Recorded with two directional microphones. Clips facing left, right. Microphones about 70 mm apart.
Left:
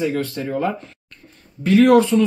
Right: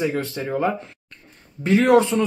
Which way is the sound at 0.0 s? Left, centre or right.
Centre.